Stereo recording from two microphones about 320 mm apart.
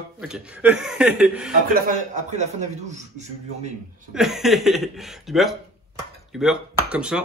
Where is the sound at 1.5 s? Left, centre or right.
Right.